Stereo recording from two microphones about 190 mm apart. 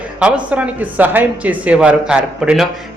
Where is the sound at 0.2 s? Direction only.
5° right (ahead or behind).